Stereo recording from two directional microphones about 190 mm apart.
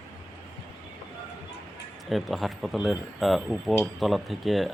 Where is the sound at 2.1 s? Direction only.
Centre (ahead or behind).